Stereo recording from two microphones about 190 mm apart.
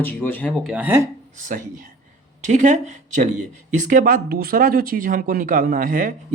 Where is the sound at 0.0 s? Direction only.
10° left (ahead or behind); by 1.0 s 10° right (ahead or behind).